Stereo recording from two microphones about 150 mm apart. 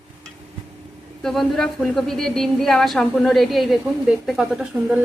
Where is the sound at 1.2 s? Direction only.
Centre (ahead or behind).